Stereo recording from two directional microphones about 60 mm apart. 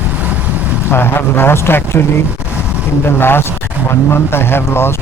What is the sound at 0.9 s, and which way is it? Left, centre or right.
Speech, left.